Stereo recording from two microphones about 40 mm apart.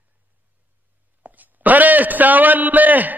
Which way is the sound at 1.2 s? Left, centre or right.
Right.